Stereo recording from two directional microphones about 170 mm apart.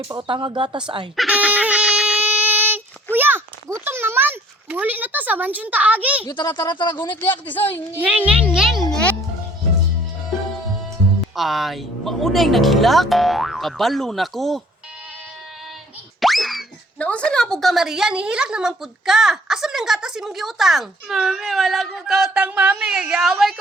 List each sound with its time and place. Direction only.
0.1 s speech: 30° right (ahead or behind)
1.1 s a sound: centre (ahead or behind)
6.2 s speech: 25° left (ahead or behind)
7.2 s a man's voice: 10° left (ahead or behind)
8.0 s speech: 5° right (ahead or behind)
11.3 s speech: centre (ahead or behind)
16.2 s speech: centre (ahead or behind)